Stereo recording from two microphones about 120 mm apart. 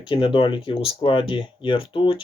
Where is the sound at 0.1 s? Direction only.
45° left (ahead or behind).